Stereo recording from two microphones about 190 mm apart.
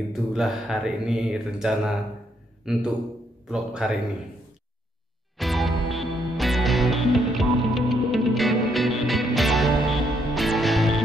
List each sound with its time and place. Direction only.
0.1 s mantra: centre (ahead or behind)
2.6 s a man's voice: 5° right (ahead or behind)
3.4 s mantra: centre (ahead or behind)
5.4 s music: centre (ahead or behind)